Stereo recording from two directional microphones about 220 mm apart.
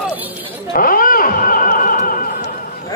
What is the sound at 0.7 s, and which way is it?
Music, 40° left (ahead or behind).